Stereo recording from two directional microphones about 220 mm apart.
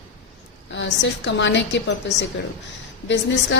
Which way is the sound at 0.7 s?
55° left (ahead or behind).